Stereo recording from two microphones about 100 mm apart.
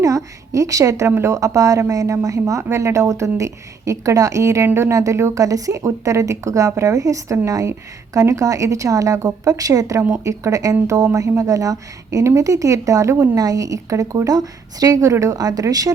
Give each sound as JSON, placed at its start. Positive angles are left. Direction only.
{"t": 0.0, "sound": "a woman's voice", "side_deg": -35}